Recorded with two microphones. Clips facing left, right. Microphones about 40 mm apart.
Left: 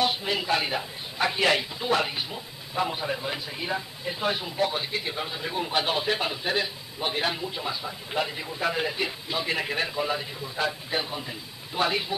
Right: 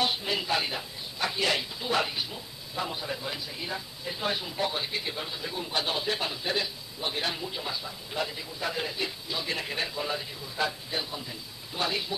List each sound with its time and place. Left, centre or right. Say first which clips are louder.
0.2 s a man's voice: left 3 dB; centre
8.1 s a man's voice: left 4 dB; left
10.9 s a man's voice: left 4 dB; left